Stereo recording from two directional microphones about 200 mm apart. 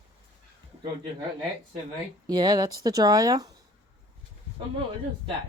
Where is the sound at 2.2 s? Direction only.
20° right (ahead or behind).